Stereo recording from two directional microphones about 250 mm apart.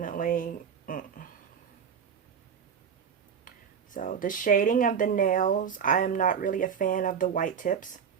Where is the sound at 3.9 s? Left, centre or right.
Left.